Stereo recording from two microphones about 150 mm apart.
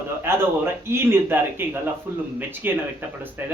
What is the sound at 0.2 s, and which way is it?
A man's voice, 15° right (ahead or behind).